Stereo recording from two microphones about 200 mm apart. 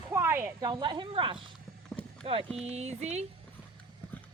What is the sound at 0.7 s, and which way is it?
Speech, 20° right (ahead or behind).